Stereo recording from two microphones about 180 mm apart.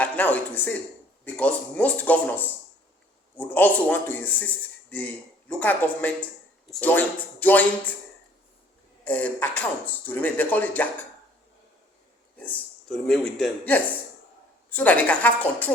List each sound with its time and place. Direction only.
0.0 s speech: 10° left (ahead or behind)
9.0 s speech: 10° left (ahead or behind)
12.4 s speech: 5° left (ahead or behind)